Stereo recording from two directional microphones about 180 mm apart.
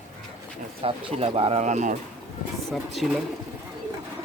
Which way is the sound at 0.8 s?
35° right (ahead or behind).